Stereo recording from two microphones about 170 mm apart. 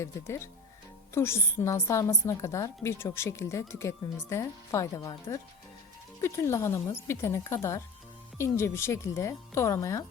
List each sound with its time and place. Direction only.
0.0 s a woman's voice: 15° left (ahead or behind)